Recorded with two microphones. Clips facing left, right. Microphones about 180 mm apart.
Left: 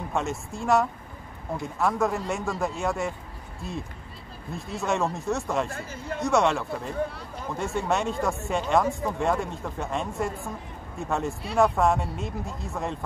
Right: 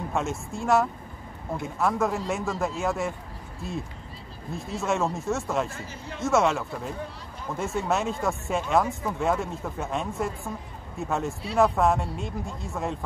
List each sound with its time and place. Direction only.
0.1 s speech: centre (ahead or behind)
5.7 s a man's voice: 55° left (ahead or behind)
6.2 s speech: centre (ahead or behind)